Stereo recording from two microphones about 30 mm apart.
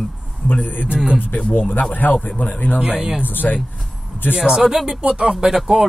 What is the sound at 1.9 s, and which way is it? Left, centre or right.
Speech, left.